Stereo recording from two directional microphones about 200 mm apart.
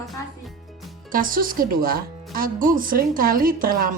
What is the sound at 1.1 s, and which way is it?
Speech, 45° right (ahead or behind).